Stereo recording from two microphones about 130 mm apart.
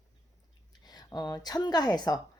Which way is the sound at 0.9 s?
30° left (ahead or behind).